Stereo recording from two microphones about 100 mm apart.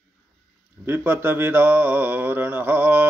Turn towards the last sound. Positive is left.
turn(degrees=-20)  # may be behind; listen again after turning